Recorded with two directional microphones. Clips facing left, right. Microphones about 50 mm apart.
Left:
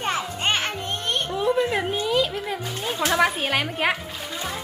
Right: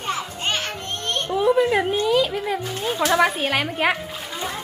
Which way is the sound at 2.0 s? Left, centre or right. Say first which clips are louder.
Right 3 dB; centre.